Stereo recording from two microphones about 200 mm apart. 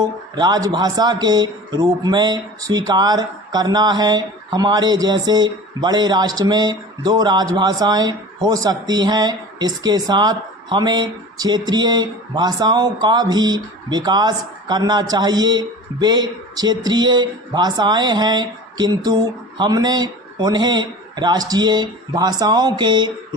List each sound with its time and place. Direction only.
0.0 s speech: 20° right (ahead or behind)